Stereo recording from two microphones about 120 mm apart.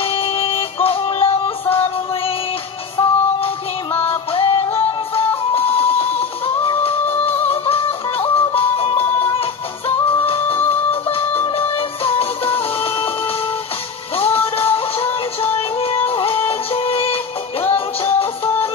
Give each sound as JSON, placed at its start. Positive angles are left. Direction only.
{"t": 0.0, "sound": "music", "side_deg": 50}
{"t": 14.1, "sound": "music", "side_deg": 50}